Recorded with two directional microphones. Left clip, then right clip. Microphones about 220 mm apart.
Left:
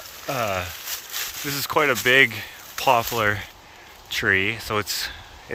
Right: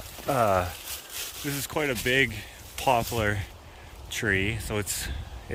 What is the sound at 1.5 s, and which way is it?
Speech, 10° right (ahead or behind).